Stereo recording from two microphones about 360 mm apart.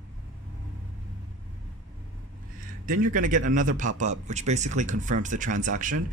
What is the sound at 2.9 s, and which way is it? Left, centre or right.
A man's voice, right.